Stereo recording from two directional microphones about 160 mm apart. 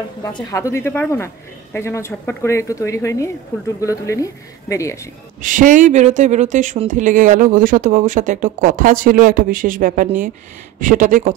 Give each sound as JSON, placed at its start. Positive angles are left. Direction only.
{"t": 0.2, "sound": "a woman's voice", "side_deg": 25}
{"t": 5.4, "sound": "speech", "side_deg": -55}